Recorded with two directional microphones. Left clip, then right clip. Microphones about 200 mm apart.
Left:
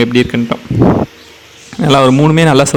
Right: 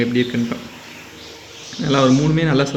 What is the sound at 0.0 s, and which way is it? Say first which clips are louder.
Speech: left 8 dB; 45° left (ahead or behind).